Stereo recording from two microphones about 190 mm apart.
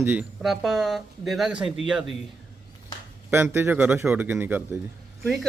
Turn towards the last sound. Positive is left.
turn(degrees=0)  # may be behind; listen again after turning